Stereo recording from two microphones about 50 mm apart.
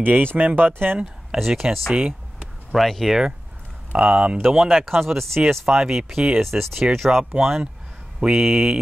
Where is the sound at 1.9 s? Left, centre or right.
Centre.